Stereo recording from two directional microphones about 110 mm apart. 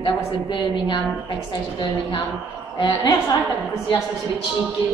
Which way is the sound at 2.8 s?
40° left (ahead or behind).